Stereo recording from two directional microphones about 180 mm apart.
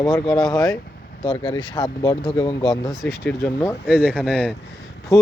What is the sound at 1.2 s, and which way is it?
Speech, 25° left (ahead or behind).